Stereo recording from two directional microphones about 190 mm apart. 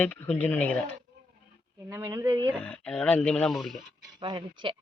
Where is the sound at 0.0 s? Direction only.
10° left (ahead or behind).